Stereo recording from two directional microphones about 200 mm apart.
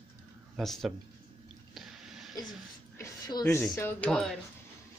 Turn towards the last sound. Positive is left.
turn(degrees=0)  # may be behind; listen again after turning